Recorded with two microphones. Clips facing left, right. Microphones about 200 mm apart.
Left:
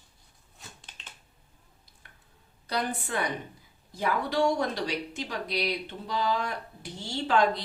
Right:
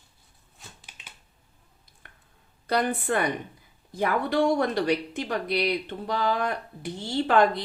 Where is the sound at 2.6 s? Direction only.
55° right (ahead or behind).